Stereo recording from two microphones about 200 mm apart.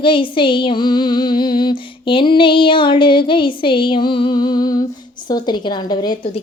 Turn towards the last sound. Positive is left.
turn(degrees=20)  # may be behind; listen again after turning